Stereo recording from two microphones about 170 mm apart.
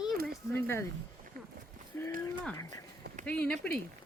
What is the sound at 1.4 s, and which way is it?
Walk, 55° right (ahead or behind).